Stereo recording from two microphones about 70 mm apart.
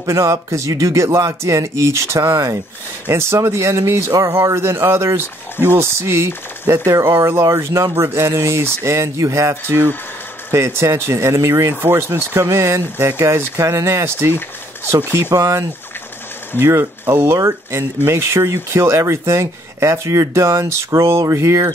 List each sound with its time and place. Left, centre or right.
0.0 s speech: right
11.8 s speech: right
15.3 s speech: right